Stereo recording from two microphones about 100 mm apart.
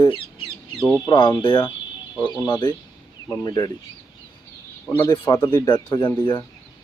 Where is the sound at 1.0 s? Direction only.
50° left (ahead or behind).